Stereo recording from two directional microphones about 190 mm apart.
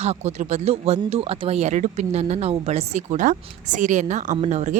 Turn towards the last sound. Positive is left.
turn(degrees=-35)  # may be behind; listen again after turning